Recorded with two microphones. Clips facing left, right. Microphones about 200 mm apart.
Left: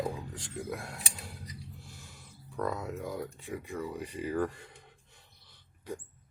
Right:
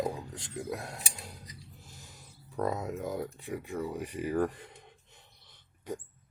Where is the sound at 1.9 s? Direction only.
40° right (ahead or behind).